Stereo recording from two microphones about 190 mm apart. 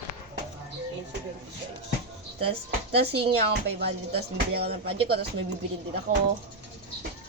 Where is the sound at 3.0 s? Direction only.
60° right (ahead or behind).